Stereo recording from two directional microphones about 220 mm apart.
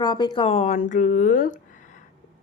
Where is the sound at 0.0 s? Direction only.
20° left (ahead or behind).